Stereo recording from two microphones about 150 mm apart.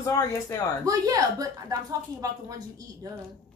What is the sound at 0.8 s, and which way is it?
A woman's voice, 25° right (ahead or behind).